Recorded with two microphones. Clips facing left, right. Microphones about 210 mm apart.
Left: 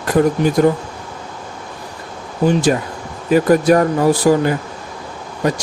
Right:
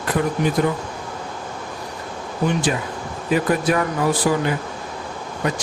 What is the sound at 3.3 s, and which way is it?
Speech, 40° left (ahead or behind).